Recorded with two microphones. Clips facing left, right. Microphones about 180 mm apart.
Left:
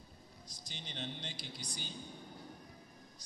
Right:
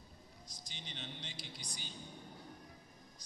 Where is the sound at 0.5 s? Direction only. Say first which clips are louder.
Left 3 dB; 35° left (ahead or behind).